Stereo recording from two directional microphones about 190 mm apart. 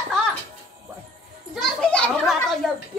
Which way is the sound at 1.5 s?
5° left (ahead or behind).